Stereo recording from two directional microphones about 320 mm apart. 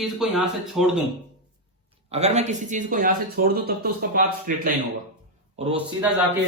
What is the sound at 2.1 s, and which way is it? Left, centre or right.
A man's voice, right.